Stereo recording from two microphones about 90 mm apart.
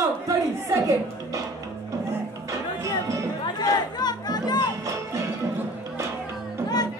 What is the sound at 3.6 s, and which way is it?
Music, 50° left (ahead or behind).